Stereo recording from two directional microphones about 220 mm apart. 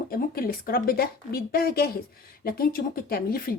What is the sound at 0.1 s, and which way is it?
A woman's voice, 45° left (ahead or behind).